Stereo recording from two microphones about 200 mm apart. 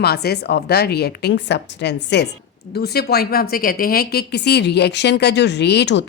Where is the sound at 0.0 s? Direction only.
50° left (ahead or behind).